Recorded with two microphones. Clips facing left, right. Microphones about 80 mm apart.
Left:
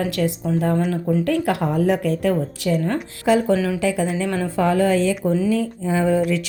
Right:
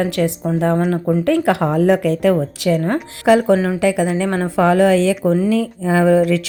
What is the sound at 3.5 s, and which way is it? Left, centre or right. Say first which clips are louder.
Speech: right 3 dB; right.